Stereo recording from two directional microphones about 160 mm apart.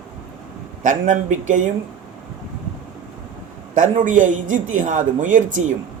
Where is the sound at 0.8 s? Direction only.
50° right (ahead or behind).